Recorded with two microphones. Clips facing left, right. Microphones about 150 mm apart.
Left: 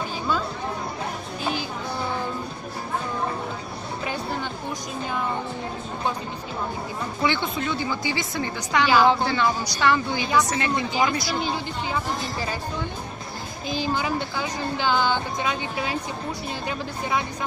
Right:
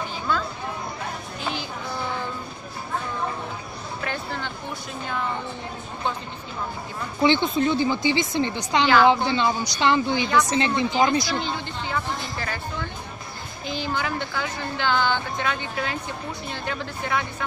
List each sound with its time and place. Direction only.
4.0 s a sound: 15° left (ahead or behind)
7.2 s speech: 30° right (ahead or behind)
11.4 s speech: 15° left (ahead or behind)
13.7 s speech: 15° left (ahead or behind)